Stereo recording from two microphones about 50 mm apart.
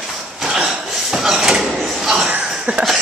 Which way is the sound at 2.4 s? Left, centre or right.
Right.